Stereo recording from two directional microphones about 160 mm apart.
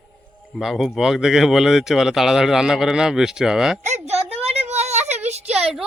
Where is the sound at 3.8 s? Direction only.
45° right (ahead or behind).